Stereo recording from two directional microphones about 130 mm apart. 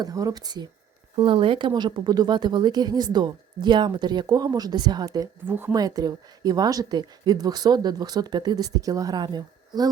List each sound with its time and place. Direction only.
0.0 s speech: 25° right (ahead or behind)
1.1 s speech: 40° right (ahead or behind)
5.5 s speech: 15° right (ahead or behind)
5.7 s speech: 30° right (ahead or behind)